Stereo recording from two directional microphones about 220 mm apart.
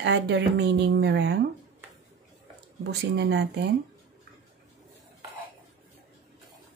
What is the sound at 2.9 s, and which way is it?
Speech, 50° right (ahead or behind).